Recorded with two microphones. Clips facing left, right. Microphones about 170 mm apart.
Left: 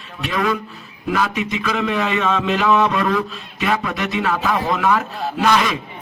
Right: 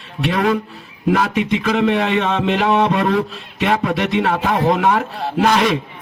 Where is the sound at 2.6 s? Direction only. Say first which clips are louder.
Right 1 dB; 35° right (ahead or behind).